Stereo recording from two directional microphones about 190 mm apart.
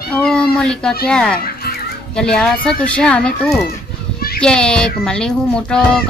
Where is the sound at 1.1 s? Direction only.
5° left (ahead or behind).